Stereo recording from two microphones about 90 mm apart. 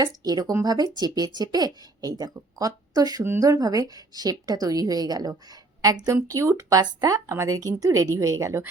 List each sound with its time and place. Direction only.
0.0 s speech: 45° right (ahead or behind)